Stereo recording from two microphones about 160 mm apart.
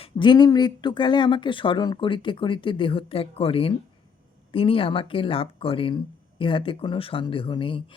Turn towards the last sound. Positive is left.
turn(degrees=30)  # may be behind; listen again after turning